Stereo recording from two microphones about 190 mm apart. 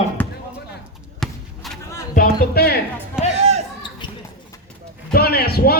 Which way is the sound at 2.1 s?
50° left (ahead or behind).